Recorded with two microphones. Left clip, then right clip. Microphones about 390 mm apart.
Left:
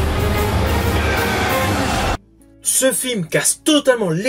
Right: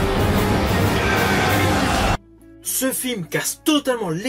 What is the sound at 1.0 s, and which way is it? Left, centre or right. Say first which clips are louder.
Music: even; centre.